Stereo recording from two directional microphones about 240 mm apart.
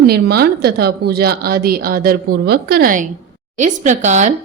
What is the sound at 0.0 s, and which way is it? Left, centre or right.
A woman's voice, right.